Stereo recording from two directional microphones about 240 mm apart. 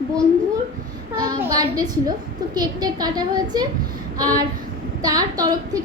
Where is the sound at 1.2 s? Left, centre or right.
Centre.